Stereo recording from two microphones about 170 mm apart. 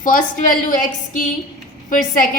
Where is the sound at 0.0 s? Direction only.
50° left (ahead or behind).